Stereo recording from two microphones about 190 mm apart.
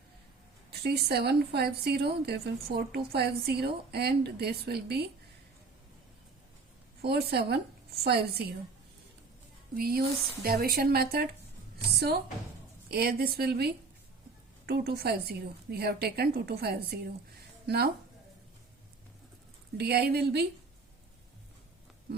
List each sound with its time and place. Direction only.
0.8 s a woman's voice: 55° right (ahead or behind)
7.0 s a woman's voice: 55° right (ahead or behind)
9.7 s a woman's voice: 55° right (ahead or behind)
19.7 s a woman's voice: 55° right (ahead or behind)